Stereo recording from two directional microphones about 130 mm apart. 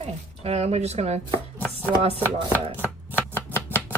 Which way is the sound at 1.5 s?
15° right (ahead or behind).